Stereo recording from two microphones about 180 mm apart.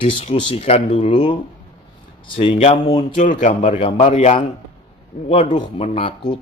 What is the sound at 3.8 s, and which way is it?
Speech, 30° left (ahead or behind).